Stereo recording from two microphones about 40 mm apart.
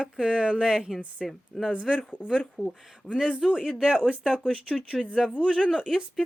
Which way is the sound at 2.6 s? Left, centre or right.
Right.